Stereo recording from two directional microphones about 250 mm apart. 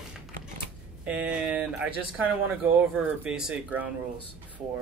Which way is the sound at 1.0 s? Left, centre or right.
Centre.